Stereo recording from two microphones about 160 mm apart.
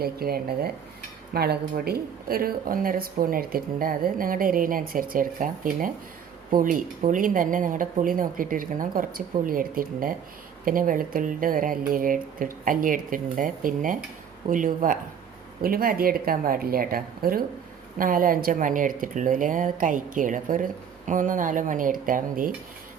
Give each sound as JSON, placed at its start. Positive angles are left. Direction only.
{"t": 0.0, "sound": "speech", "side_deg": -70}